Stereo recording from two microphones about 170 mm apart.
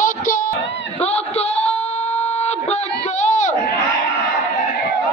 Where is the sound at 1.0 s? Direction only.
40° left (ahead or behind).